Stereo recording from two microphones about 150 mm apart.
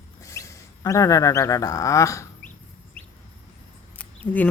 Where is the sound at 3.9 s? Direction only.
10° left (ahead or behind).